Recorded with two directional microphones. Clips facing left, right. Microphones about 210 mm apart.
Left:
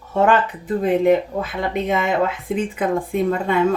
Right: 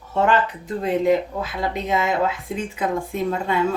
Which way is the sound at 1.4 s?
55° left (ahead or behind).